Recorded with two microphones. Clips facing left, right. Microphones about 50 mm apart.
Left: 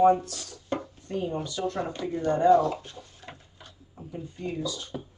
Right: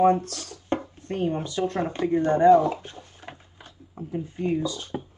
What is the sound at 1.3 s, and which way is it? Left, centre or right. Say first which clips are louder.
Speech: right 3 dB; right.